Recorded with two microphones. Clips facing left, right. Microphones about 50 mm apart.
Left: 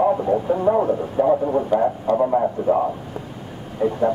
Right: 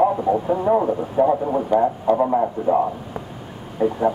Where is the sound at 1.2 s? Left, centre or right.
Centre.